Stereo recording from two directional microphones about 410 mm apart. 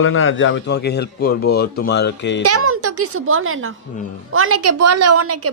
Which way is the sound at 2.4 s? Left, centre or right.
Right.